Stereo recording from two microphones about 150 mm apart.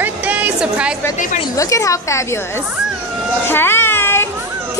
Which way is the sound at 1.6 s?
20° left (ahead or behind).